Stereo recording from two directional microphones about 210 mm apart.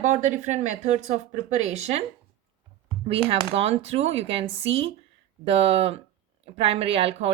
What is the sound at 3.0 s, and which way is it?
Speech, 25° right (ahead or behind).